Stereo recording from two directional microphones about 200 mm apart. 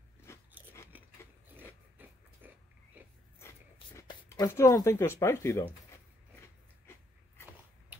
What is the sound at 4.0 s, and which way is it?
Speech, 15° left (ahead or behind).